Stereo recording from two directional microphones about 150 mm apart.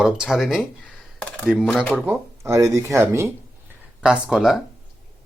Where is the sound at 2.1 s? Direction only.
20° right (ahead or behind).